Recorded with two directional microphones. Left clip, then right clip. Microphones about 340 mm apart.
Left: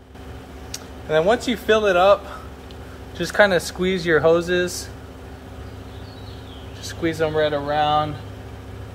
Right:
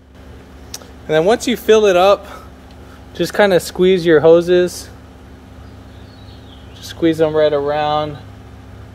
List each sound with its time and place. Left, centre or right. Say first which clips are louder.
0.7 s speech: right 5 dB; right
6.8 s speech: right 8 dB; right